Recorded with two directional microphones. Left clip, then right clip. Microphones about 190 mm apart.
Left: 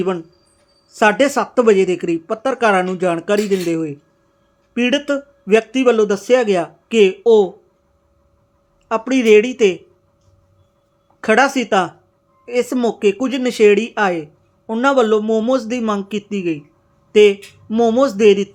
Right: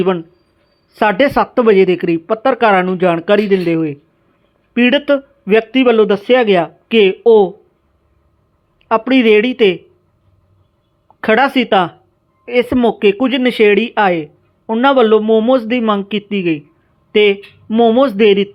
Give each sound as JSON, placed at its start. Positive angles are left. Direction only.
{"t": 0.9, "sound": "speech", "side_deg": -15}
{"t": 8.9, "sound": "speech", "side_deg": -15}
{"t": 11.2, "sound": "speech", "side_deg": -20}